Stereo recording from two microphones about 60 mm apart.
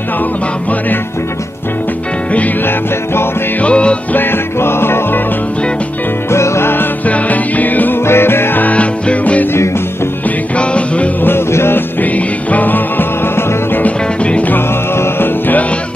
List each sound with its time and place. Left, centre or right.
3.6 s music: centre
4.2 s music: left
6.3 s music: left
7.1 s music: left
8.0 s music: left
10.5 s music: left
11.2 s music: left
12.0 s music: left
15.0 s music: left